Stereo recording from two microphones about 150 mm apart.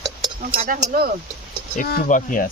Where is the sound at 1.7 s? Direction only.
60° left (ahead or behind).